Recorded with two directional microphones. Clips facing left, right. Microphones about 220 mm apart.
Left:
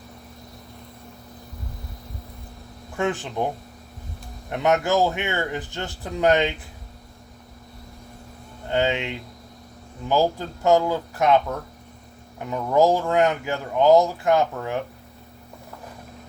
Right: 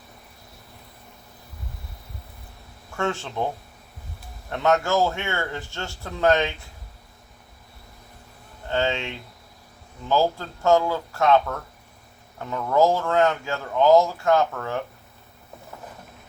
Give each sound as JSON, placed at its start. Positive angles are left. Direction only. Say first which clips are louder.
{"t": 2.9, "sound": "speech", "louder": "left 2 dB", "side_deg": 15}
{"t": 8.7, "sound": "speech", "louder": "left 2 dB", "side_deg": 15}